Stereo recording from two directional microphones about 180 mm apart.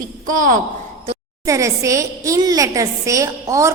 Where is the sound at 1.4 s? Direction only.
15° right (ahead or behind).